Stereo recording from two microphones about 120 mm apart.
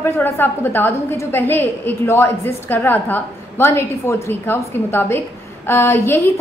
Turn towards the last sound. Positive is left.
turn(degrees=20)  # may be behind; listen again after turning